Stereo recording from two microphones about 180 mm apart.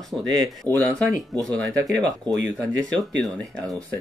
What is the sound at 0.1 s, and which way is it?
Speech, 5° left (ahead or behind).